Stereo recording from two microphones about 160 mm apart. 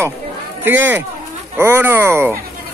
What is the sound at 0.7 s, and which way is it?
Speech, 15° right (ahead or behind).